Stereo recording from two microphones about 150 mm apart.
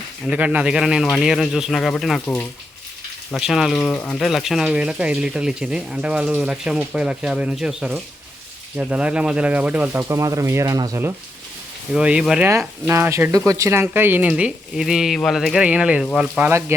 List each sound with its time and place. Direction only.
0.3 s speech: 10° right (ahead or behind); by 2.5 s 10° left (ahead or behind)
3.3 s speech: centre (ahead or behind); by 11.1 s 20° right (ahead or behind)
11.9 s speech: 5° right (ahead or behind)
12.5 s speech: 15° right (ahead or behind)